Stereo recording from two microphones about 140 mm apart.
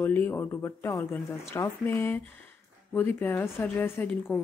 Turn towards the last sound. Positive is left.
turn(degrees=15)  # may be behind; listen again after turning